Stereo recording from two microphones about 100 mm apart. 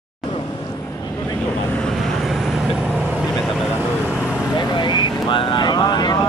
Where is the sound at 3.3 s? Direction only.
Centre (ahead or behind).